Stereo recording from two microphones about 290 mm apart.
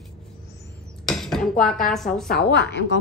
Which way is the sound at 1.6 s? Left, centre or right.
Centre.